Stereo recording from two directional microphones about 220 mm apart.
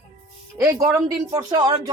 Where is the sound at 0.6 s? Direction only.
15° right (ahead or behind).